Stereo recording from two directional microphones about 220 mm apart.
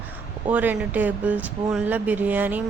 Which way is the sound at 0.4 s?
10° right (ahead or behind).